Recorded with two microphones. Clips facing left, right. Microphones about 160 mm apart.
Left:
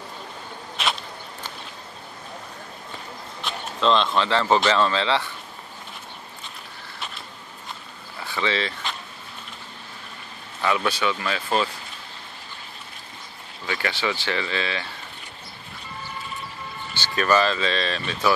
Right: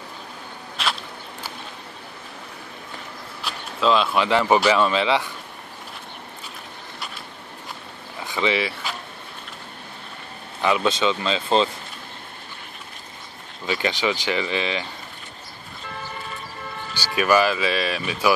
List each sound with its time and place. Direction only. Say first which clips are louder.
3.4 s speech: right 1 dB; 5° right (ahead or behind)
8.2 s vehicle: right 3 dB; 15° right (ahead or behind)
10.6 s speech: right 3 dB; 20° right (ahead or behind)
13.7 s speech: right 3 dB; 20° right (ahead or behind)
16.9 s speech: right 2 dB; 10° right (ahead or behind)